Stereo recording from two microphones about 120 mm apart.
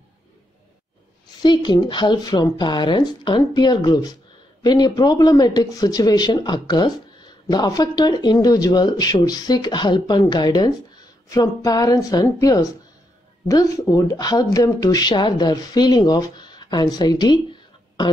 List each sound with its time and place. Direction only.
1.4 s a woman's voice: 40° left (ahead or behind)